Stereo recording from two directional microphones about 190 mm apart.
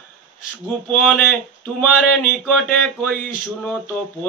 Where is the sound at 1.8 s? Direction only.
5° left (ahead or behind).